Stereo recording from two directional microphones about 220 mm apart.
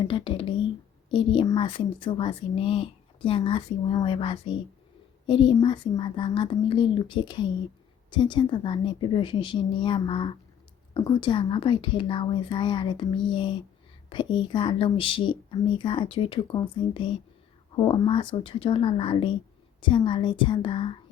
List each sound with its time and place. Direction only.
0.1 s speech: 20° left (ahead or behind)